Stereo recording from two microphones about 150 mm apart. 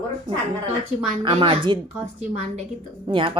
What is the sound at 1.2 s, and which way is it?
Speech, 35° right (ahead or behind).